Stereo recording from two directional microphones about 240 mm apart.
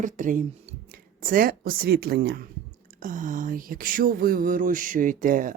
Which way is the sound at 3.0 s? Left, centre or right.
Right.